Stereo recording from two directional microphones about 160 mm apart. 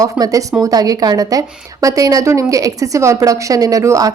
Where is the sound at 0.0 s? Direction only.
20° right (ahead or behind).